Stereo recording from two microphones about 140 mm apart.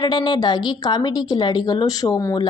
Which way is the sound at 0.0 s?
30° left (ahead or behind).